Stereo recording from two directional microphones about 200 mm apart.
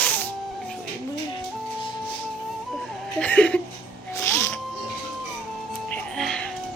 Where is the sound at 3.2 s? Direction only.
5° left (ahead or behind).